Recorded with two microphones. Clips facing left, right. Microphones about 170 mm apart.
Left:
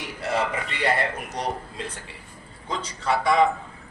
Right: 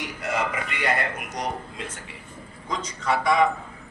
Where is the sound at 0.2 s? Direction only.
30° left (ahead or behind).